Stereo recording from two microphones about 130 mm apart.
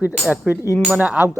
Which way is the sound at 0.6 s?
25° left (ahead or behind).